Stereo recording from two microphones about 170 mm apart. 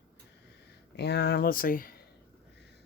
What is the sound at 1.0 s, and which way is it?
Speech, 75° left (ahead or behind).